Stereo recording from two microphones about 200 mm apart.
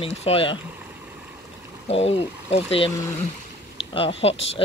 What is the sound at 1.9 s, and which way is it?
Speech, 30° left (ahead or behind).